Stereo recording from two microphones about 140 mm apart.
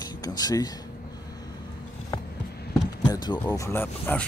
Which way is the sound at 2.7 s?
30° left (ahead or behind).